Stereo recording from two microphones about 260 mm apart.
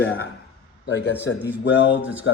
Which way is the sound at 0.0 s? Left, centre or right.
Left.